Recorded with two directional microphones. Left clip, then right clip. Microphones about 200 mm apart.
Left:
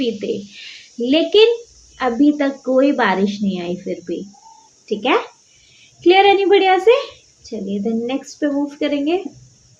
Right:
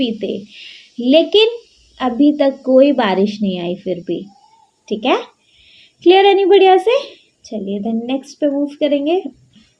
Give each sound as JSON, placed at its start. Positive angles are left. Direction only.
{"t": 0.0, "sound": "a woman's voice", "side_deg": -45}